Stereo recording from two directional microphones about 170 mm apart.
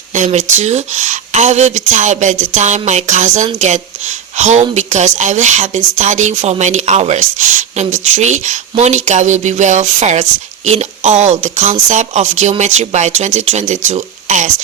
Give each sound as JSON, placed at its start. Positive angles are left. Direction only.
{"t": 0.1, "sound": "speech", "side_deg": -45}